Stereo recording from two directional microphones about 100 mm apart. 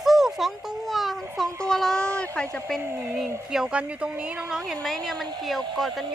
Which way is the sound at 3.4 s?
5° right (ahead or behind).